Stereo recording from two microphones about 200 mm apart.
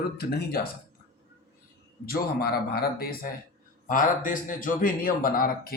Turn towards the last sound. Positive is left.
turn(degrees=45)  # may be behind; listen again after turning